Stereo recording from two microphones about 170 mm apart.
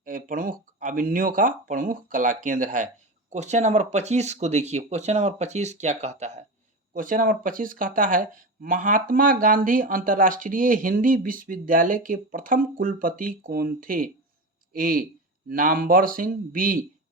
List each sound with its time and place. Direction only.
0.0 s speech: 50° right (ahead or behind)